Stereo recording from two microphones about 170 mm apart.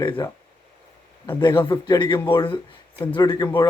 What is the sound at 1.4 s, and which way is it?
Speech, 25° left (ahead or behind).